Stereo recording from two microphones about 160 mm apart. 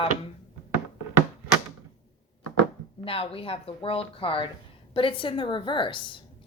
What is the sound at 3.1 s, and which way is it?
A woman's voice, 35° left (ahead or behind).